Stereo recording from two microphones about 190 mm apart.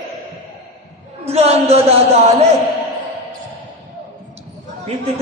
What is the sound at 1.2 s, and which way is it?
Speech, 30° right (ahead or behind).